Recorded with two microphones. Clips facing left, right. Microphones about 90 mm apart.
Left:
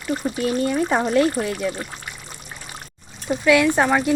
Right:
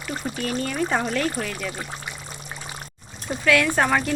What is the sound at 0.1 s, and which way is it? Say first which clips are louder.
Speech: left 6 dB; 5° right (ahead or behind).